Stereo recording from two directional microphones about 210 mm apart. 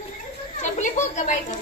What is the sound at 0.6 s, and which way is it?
Children playing, 35° left (ahead or behind).